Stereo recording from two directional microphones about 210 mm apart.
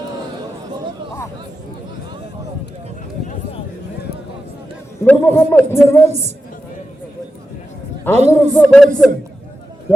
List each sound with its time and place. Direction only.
5.0 s a man's voice: 10° left (ahead or behind)
6.1 s a man's voice: 30° right (ahead or behind)
8.1 s a man's voice: 30° right (ahead or behind)
8.5 s speech: 5° left (ahead or behind)